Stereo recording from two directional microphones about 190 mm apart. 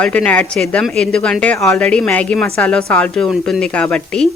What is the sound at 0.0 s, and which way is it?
Speech, 10° left (ahead or behind).